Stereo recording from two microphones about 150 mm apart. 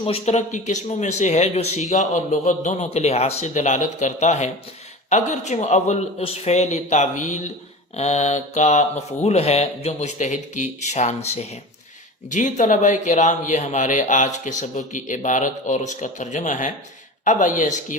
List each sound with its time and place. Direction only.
0.0 s speech: 45° left (ahead or behind)